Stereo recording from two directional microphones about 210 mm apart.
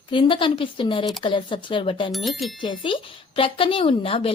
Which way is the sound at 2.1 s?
Centre (ahead or behind).